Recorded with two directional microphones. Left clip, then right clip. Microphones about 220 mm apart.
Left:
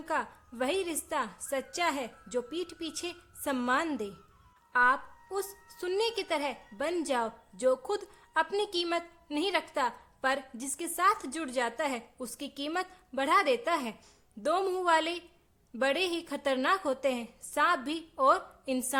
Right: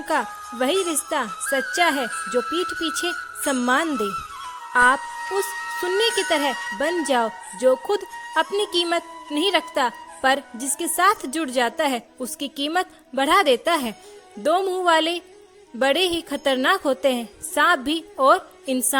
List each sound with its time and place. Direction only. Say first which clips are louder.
0.1 s a woman's voice: right 10 dB; 30° right (ahead or behind)